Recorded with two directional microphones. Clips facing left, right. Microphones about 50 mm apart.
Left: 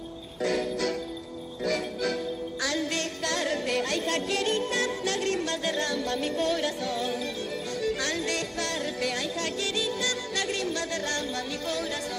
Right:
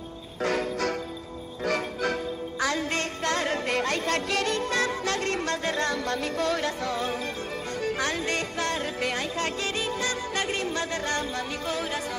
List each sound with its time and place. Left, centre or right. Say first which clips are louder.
0.4 s music: right 1 dB; right
6.2 s music: even; right